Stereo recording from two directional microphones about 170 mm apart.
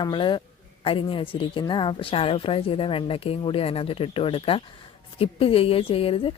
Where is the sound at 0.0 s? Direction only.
30° left (ahead or behind).